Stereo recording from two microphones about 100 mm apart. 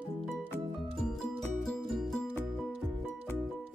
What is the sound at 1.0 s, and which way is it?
Music, 5° left (ahead or behind).